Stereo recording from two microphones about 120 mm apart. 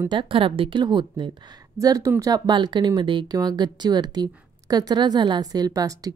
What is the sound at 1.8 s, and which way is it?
Speech, 30° right (ahead or behind).